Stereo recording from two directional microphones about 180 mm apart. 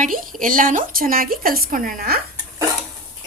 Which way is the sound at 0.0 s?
50° right (ahead or behind).